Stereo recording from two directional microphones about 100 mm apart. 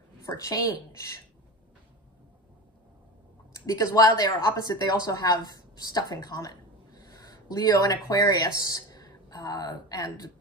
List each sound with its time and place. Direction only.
0.3 s speech: 30° left (ahead or behind)
3.5 s speech: 35° left (ahead or behind)